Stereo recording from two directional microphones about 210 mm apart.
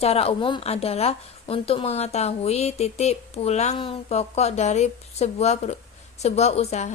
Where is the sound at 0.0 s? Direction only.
30° left (ahead or behind).